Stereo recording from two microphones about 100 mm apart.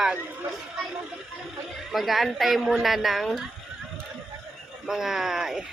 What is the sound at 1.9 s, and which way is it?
Speech, centre (ahead or behind).